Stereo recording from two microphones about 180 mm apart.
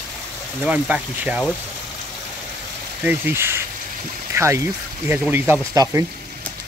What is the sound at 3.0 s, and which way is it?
Speech, 10° right (ahead or behind).